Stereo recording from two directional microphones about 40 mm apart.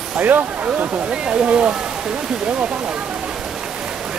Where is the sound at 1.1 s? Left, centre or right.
Right.